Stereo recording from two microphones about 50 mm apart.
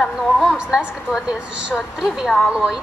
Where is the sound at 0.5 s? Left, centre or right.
Centre.